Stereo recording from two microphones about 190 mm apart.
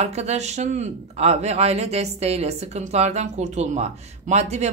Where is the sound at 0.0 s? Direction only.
35° right (ahead or behind).